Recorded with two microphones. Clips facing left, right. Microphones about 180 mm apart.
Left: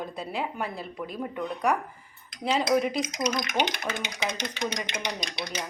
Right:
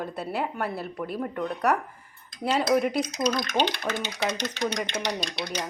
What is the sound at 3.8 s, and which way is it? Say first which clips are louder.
Speech: right 3 dB; 20° left (ahead or behind).